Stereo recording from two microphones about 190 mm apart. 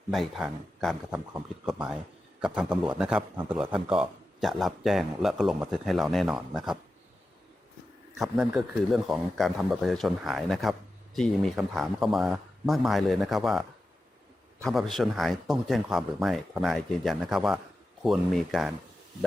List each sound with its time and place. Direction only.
0.1 s speech: centre (ahead or behind)
8.2 s speech: centre (ahead or behind)